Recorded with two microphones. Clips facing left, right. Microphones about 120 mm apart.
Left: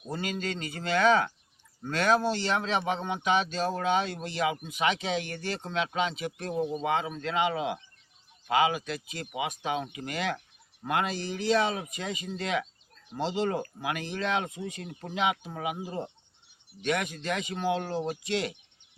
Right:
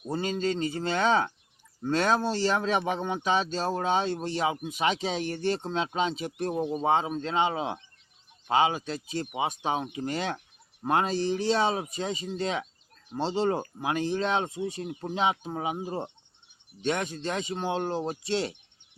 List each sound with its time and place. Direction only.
0.1 s speech: 30° right (ahead or behind)